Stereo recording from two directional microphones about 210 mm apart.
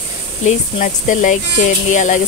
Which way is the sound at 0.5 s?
35° left (ahead or behind).